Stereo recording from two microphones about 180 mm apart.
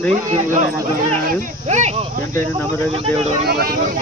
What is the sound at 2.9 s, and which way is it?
Speech, 35° right (ahead or behind).